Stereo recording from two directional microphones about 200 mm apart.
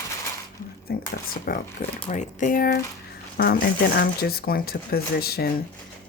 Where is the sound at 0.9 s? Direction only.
50° left (ahead or behind).